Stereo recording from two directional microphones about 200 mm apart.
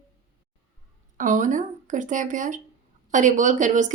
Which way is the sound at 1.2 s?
40° right (ahead or behind).